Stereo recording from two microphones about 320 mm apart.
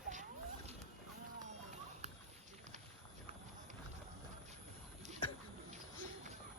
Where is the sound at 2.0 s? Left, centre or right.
Right.